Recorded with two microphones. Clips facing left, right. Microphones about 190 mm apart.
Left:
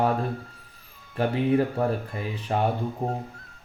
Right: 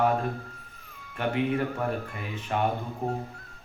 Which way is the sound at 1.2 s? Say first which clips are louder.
Left 4 dB; 35° left (ahead or behind).